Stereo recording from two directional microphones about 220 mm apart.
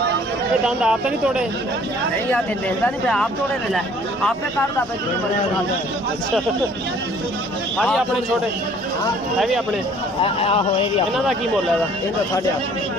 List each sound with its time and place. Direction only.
0.6 s speech: 5° right (ahead or behind)
2.3 s speech: 5° left (ahead or behind)
7.8 s speech: centre (ahead or behind)
10.2 s speech: 25° left (ahead or behind)